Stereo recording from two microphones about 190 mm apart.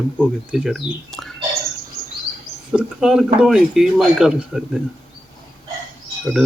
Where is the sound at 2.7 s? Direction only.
5° right (ahead or behind).